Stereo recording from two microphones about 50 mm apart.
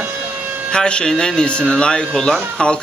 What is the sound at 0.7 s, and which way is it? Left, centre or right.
A man's voice, centre.